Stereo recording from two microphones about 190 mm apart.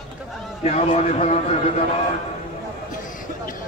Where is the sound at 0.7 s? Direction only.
35° left (ahead or behind).